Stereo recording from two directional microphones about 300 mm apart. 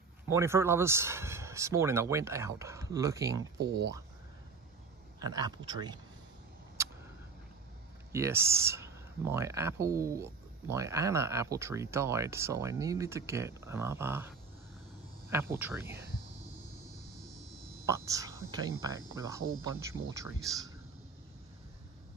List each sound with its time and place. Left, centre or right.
0.3 s speech: centre
3.5 s speech: right
5.2 s speech: centre
8.1 s speech: centre
17.8 s speech: centre